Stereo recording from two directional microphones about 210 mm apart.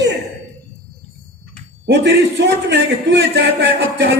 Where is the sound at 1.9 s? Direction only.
55° right (ahead or behind).